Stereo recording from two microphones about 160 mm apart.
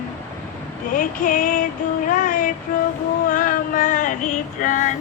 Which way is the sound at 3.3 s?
60° left (ahead or behind).